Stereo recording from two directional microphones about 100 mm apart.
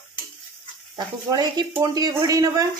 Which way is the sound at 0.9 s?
45° right (ahead or behind).